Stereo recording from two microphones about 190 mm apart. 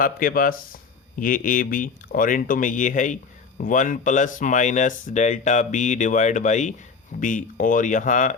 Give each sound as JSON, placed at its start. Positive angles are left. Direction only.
{"t": 0.0, "sound": "speech", "side_deg": 45}